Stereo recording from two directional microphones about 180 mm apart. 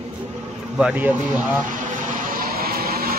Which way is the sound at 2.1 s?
55° right (ahead or behind).